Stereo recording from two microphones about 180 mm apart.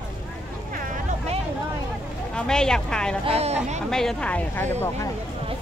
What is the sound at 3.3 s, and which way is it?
Speech, 35° right (ahead or behind).